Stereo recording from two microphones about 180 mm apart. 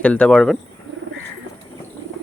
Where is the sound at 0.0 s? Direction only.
5° left (ahead or behind).